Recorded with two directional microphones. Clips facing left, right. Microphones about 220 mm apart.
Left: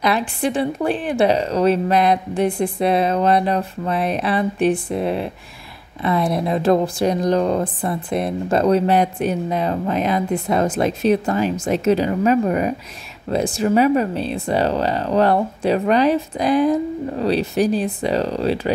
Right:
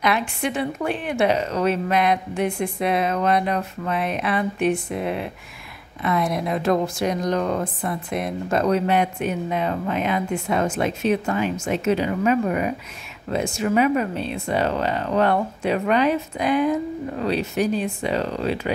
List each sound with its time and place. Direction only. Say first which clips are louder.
0.0 s speech: left 3 dB; 35° left (ahead or behind)